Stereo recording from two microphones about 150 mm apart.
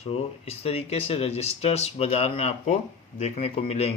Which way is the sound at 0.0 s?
40° left (ahead or behind).